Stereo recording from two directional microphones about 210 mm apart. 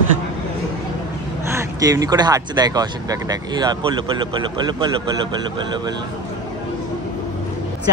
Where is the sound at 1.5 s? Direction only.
15° right (ahead or behind).